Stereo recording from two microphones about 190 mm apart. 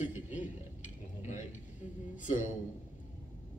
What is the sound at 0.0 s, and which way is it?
Dishes, 40° left (ahead or behind).